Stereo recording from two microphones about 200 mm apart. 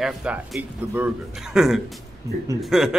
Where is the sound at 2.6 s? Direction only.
Centre (ahead or behind).